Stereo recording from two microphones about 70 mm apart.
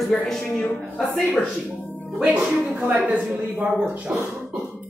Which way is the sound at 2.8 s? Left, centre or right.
Right.